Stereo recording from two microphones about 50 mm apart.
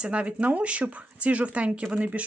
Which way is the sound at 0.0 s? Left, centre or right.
Right.